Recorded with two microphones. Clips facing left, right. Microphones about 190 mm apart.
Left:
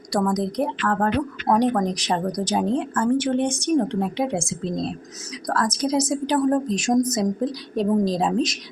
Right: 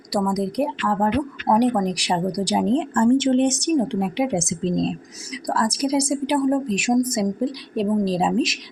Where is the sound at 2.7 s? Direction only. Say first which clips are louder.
Right 7 dB; 25° right (ahead or behind).